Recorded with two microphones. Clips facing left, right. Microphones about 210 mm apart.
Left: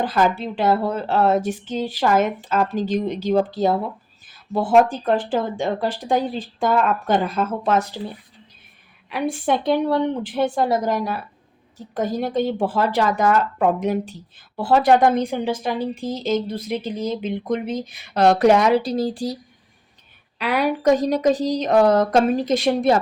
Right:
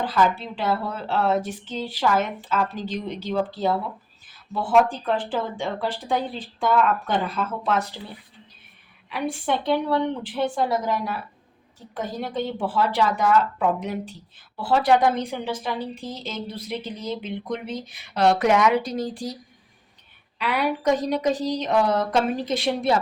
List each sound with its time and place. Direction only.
0.0 s a woman's voice: 50° left (ahead or behind)
9.0 s a woman's voice: 45° left (ahead or behind)
20.4 s a woman's voice: 40° left (ahead or behind)